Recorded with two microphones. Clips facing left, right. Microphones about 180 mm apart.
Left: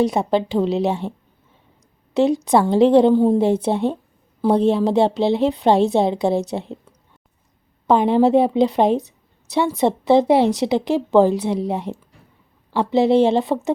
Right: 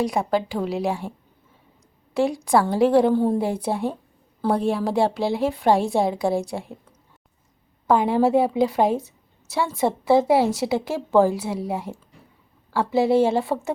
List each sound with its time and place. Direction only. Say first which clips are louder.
0.0 s a woman's voice: left 4 dB; 25° left (ahead or behind)
2.1 s a woman's voice: left 4 dB; 20° left (ahead or behind)
7.9 s a woman's voice: left 4 dB; 20° left (ahead or behind)